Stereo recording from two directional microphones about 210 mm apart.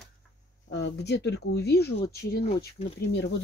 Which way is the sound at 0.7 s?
55° left (ahead or behind).